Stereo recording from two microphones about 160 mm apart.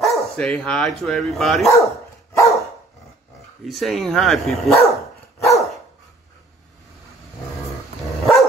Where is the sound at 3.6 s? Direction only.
Centre (ahead or behind).